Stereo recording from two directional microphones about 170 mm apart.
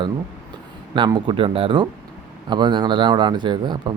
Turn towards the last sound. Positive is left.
turn(degrees=-25)  # may be behind; listen again after turning